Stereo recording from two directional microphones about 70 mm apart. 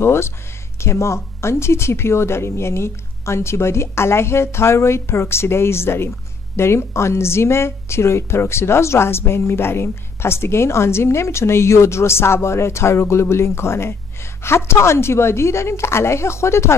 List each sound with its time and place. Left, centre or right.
0.0 s speech: left